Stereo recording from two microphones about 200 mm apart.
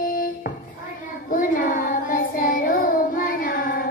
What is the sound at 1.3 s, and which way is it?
Child singing, 40° left (ahead or behind).